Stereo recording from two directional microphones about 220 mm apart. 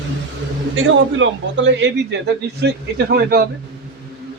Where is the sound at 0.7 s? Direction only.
60° right (ahead or behind).